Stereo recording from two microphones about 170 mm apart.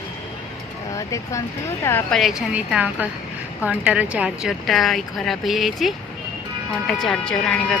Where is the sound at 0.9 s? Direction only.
20° left (ahead or behind).